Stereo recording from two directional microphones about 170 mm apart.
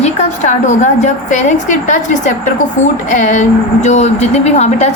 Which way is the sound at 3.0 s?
50° left (ahead or behind).